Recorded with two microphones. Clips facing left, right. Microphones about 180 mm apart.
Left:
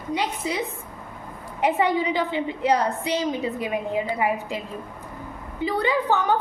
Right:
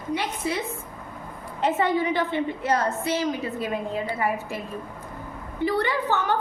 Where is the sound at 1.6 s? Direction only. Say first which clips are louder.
Left 1 dB; 15° left (ahead or behind).